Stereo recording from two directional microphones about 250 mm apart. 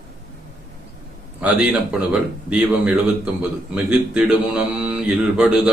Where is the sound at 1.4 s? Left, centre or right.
Centre.